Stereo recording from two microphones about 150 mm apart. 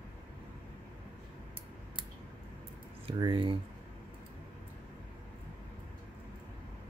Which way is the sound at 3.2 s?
30° right (ahead or behind).